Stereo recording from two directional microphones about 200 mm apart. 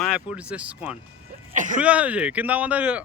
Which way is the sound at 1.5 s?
40° right (ahead or behind).